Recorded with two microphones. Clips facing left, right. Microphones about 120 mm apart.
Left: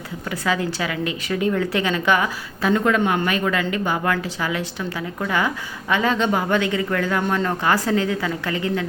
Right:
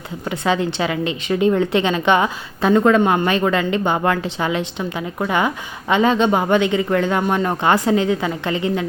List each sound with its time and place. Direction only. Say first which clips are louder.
0.3 s a woman's voice: right 4 dB; 25° right (ahead or behind)